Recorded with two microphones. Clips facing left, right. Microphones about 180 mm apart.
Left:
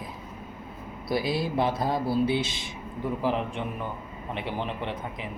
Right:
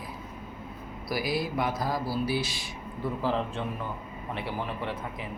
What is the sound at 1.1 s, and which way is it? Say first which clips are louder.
A man's voice: left 3 dB; 25° left (ahead or behind).